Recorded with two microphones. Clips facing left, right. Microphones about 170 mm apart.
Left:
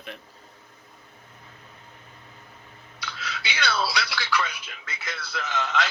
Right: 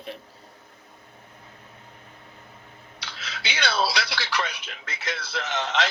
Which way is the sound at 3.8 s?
25° right (ahead or behind).